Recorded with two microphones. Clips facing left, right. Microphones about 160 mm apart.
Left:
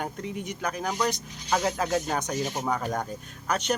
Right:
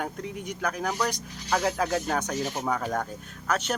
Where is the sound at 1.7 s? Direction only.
Centre (ahead or behind).